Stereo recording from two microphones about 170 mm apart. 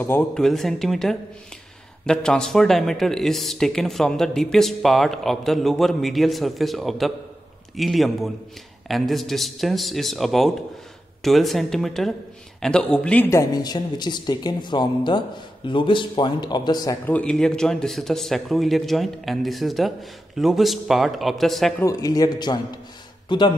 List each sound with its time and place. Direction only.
0.0 s a man's voice: 10° left (ahead or behind); by 16.9 s 25° left (ahead or behind)
17.0 s speech: 10° left (ahead or behind)
21.8 s a man's voice: 20° left (ahead or behind)